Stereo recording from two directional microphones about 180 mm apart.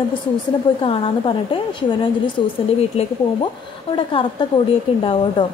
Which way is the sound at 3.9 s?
30° left (ahead or behind).